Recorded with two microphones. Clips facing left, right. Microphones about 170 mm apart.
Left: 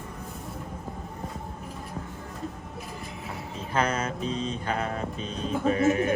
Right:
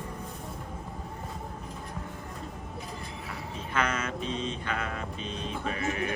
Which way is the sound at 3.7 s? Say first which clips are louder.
Left 3 dB; 35° left (ahead or behind).